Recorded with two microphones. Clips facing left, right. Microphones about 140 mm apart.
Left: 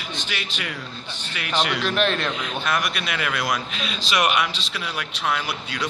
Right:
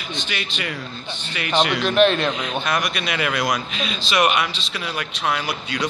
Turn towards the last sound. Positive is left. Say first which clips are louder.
# right 2 dB
turn(degrees=10)  # may be behind; listen again after turning